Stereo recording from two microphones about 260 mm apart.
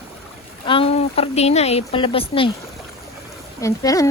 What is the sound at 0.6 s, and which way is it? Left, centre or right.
A woman's voice, left.